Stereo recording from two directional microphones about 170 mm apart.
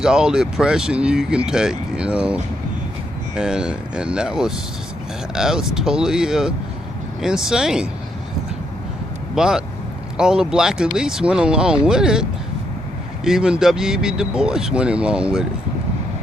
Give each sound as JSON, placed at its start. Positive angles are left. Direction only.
{"t": 0.0, "sound": "speech", "side_deg": -5}
{"t": 9.3, "sound": "speech", "side_deg": -5}